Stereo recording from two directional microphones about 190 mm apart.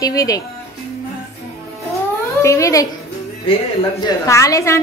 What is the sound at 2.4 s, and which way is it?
Speech, 15° left (ahead or behind).